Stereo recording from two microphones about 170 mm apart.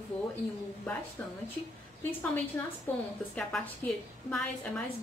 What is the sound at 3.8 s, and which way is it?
Speech, 10° left (ahead or behind).